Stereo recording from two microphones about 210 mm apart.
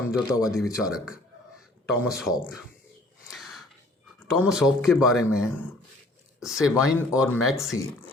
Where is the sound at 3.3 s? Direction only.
Centre (ahead or behind).